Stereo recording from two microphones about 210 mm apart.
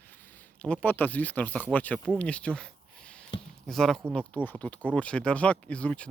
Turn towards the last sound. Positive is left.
turn(degrees=5)  # may be behind; listen again after turning